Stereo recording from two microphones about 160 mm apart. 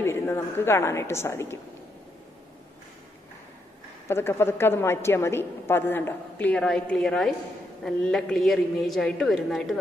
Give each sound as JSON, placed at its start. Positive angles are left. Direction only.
{"t": 0.0, "sound": "a woman's voice", "side_deg": 15}
{"t": 4.1, "sound": "a woman's voice", "side_deg": 15}